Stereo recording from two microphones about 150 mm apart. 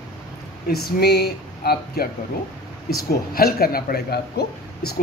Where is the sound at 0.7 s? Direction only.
90° left.